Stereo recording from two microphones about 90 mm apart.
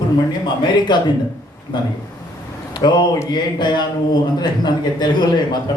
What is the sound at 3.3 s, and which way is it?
A man's voice, 55° left (ahead or behind).